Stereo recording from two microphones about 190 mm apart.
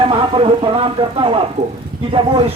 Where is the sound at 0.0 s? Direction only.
30° right (ahead or behind).